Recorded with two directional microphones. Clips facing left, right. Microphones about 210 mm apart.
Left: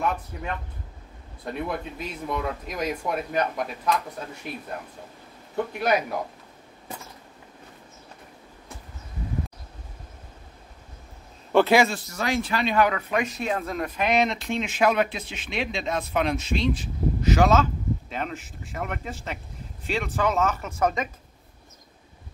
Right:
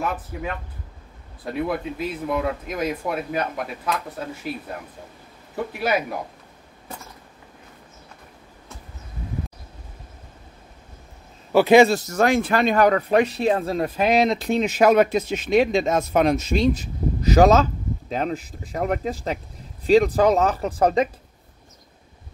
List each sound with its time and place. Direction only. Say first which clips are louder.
0.0 s speech: right 1 dB; 5° right (ahead or behind)
5.7 s speech: even; 5° right (ahead or behind)
11.5 s a sound: right 2 dB; 5° right (ahead or behind)
11.9 s speech: right 8 dB; 45° right (ahead or behind)